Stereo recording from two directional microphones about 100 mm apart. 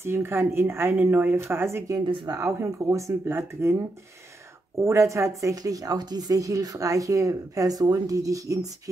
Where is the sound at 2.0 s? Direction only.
50° right (ahead or behind).